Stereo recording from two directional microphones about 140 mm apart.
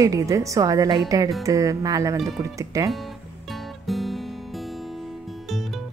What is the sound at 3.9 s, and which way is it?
Music, centre (ahead or behind).